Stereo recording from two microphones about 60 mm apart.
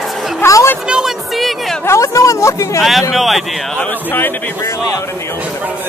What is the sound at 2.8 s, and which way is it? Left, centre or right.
Speech, centre.